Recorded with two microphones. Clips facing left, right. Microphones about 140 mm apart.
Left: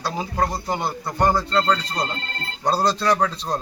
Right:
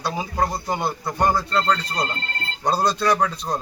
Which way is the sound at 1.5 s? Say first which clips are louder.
Left 1 dB; 5° left (ahead or behind).